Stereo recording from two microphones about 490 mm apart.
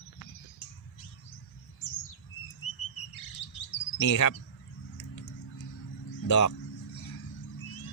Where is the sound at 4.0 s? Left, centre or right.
Left.